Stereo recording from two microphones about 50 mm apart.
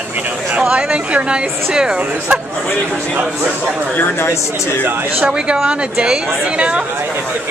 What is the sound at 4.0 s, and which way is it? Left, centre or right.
Speech, left.